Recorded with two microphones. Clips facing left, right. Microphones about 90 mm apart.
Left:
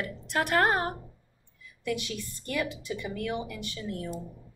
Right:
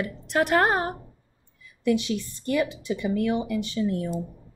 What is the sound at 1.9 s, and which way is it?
A woman's voice, 25° right (ahead or behind).